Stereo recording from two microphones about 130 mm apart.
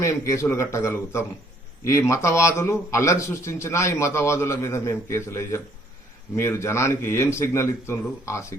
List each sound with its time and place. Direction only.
0.0 s a man's voice: 20° left (ahead or behind)